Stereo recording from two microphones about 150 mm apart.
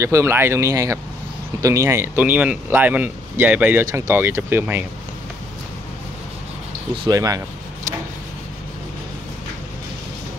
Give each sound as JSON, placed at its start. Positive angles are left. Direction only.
{"t": 0.0, "sound": "speech", "side_deg": -15}
{"t": 7.1, "sound": "speech", "side_deg": -25}